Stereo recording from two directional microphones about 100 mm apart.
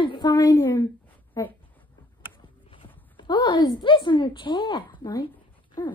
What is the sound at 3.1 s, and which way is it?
Speech, 45° left (ahead or behind).